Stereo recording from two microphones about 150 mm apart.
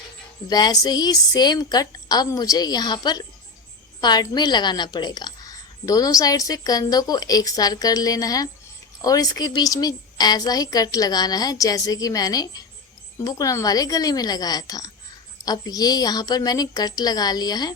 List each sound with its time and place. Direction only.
0.4 s a woman's voice: 25° left (ahead or behind)